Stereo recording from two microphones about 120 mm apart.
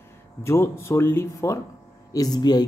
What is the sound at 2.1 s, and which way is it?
Speech, 35° left (ahead or behind).